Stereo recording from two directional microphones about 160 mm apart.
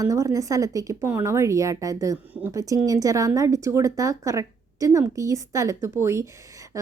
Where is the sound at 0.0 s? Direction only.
20° right (ahead or behind).